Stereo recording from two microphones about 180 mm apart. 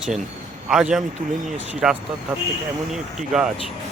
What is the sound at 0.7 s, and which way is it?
A man's voice, 5° right (ahead or behind).